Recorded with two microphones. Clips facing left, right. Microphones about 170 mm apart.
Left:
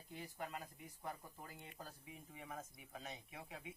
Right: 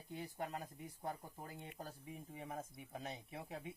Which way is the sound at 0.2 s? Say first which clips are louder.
Right 3 dB; 35° right (ahead or behind).